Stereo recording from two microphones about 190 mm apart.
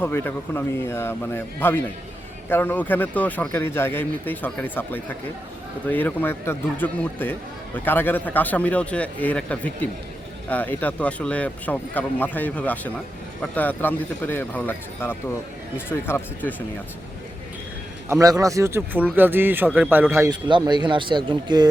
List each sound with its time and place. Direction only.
0.0 s speech: 10° left (ahead or behind)
18.1 s speech: 20° right (ahead or behind)